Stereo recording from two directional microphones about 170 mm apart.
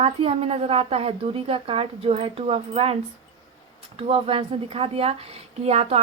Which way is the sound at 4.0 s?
35° right (ahead or behind).